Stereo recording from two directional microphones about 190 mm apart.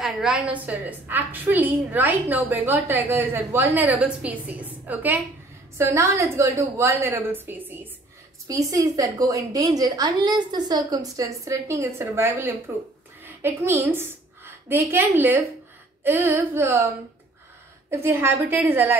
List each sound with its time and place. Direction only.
0.0 s a woman's voice: 5° right (ahead or behind)